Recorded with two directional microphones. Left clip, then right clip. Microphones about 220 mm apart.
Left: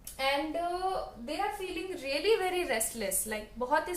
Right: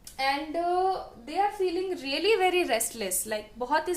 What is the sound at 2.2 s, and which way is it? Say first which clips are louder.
A woman's voice: right 5 dB; 45° right (ahead or behind).